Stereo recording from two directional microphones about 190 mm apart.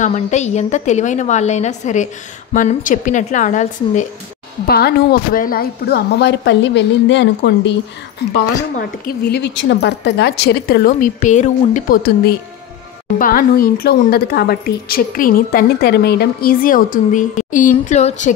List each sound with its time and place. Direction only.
0.0 s a woman's voice: 35° left (ahead or behind)
4.6 s a woman's voice: 55° left (ahead or behind)
8.7 s a woman's voice: 55° left (ahead or behind); by 18.3 s 35° left (ahead or behind)